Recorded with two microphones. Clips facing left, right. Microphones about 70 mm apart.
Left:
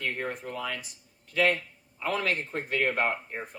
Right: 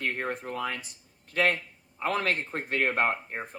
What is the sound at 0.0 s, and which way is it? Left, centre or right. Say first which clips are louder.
A man's voice: right 1 dB; right.